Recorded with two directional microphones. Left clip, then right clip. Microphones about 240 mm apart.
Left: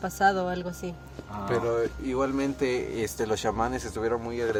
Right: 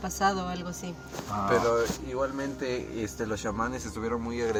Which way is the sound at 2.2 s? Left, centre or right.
Left.